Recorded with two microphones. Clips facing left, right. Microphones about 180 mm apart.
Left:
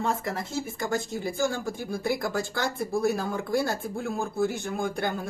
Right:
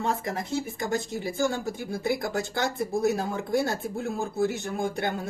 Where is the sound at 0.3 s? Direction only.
20° right (ahead or behind).